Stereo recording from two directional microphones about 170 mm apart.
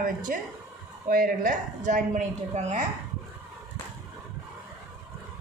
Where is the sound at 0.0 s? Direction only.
55° right (ahead or behind).